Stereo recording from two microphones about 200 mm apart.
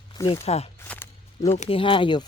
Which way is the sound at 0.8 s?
10° left (ahead or behind).